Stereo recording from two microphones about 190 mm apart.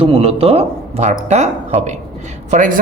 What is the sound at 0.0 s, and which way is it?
Speech, 30° right (ahead or behind).